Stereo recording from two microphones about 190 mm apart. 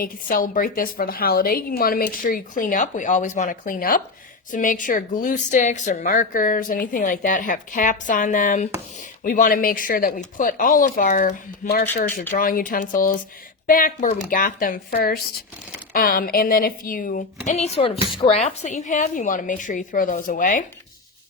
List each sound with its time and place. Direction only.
0.0 s a woman's voice: 45° left (ahead or behind)